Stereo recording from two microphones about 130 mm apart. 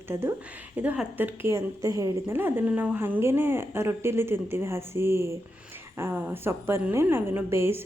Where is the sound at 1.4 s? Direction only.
25° right (ahead or behind).